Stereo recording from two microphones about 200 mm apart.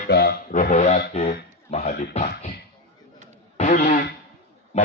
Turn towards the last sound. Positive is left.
turn(degrees=30)  # may be behind; listen again after turning